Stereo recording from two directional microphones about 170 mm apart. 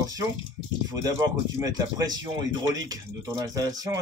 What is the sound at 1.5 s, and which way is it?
Speech, 20° right (ahead or behind).